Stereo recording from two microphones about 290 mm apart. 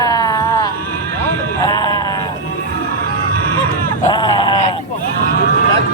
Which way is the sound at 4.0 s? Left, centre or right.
Centre.